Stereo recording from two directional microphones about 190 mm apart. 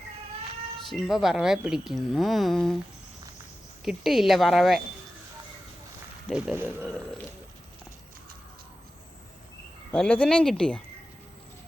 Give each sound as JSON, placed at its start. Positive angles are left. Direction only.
{"t": 0.9, "sound": "speech", "side_deg": 0}
{"t": 3.8, "sound": "speech", "side_deg": 0}
{"t": 6.2, "sound": "speech", "side_deg": 0}
{"t": 6.8, "sound": "a sound", "side_deg": 5}
{"t": 9.9, "sound": "speech", "side_deg": 5}